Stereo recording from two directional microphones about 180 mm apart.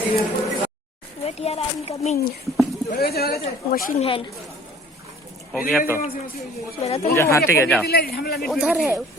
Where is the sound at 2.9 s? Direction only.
60° left (ahead or behind).